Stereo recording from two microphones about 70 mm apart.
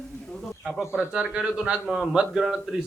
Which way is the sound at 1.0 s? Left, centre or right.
Centre.